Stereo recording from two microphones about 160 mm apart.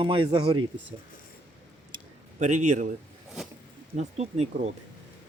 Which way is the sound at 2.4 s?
45° right (ahead or behind).